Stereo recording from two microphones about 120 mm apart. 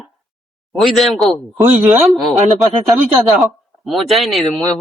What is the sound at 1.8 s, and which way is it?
Speech, 30° right (ahead or behind).